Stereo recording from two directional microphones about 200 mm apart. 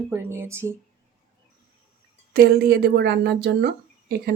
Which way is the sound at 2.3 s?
50° right (ahead or behind).